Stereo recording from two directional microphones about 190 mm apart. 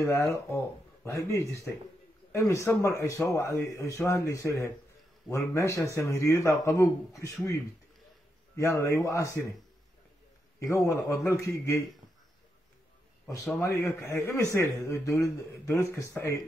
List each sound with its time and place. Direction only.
0.0 s speech: 15° left (ahead or behind)
10.6 s speech: 15° left (ahead or behind)
13.5 s speech: 15° left (ahead or behind)